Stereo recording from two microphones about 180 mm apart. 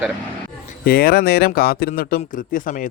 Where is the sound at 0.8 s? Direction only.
55° left (ahead or behind).